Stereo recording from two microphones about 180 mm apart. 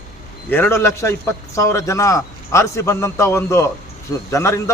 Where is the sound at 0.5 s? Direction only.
10° left (ahead or behind).